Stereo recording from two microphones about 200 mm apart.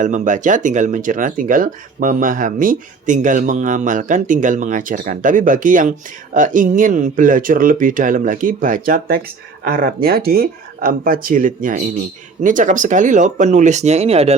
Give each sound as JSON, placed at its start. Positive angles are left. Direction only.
{"t": 0.0, "sound": "speech", "side_deg": -40}